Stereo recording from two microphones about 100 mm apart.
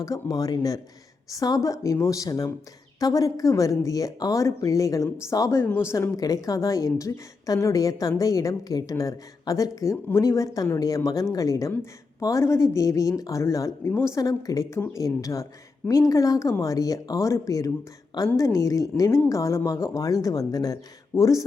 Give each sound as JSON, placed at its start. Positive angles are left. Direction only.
{"t": 0.0, "sound": "a woman's voice", "side_deg": 35}
{"t": 6.1, "sound": "a woman's voice", "side_deg": 35}